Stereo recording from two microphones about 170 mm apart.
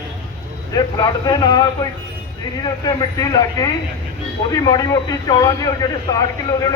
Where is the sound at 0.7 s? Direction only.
25° left (ahead or behind).